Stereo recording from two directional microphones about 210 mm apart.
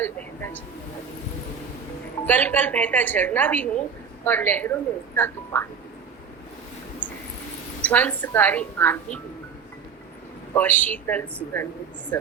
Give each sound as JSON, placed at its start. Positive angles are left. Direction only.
{"t": 0.0, "sound": "a sound", "side_deg": 10}
{"t": 2.2, "sound": "a woman's voice", "side_deg": 10}
{"t": 7.8, "sound": "a woman's voice", "side_deg": 10}
{"t": 10.5, "sound": "a woman's voice", "side_deg": 10}